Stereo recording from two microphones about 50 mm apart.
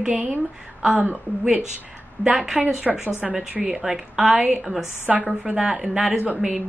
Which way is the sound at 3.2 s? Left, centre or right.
Centre.